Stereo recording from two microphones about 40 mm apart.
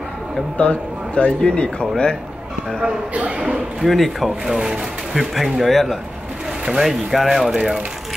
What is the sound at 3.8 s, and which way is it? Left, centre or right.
Speech, centre.